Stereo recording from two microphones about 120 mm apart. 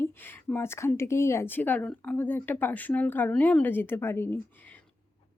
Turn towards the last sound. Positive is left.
turn(degrees=15)  # may be behind; listen again after turning